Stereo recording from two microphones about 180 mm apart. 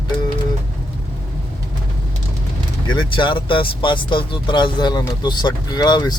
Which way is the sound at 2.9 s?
25° left (ahead or behind).